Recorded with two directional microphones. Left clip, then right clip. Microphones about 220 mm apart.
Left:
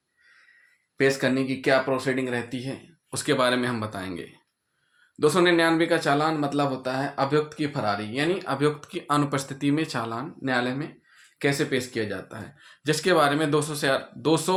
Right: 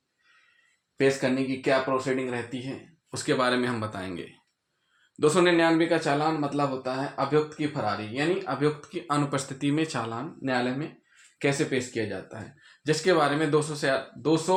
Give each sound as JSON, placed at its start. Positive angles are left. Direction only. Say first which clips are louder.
{"t": 0.9, "sound": "speech", "louder": "left 2 dB", "side_deg": 15}
{"t": 1.5, "sound": "speech", "louder": "left 3 dB", "side_deg": 30}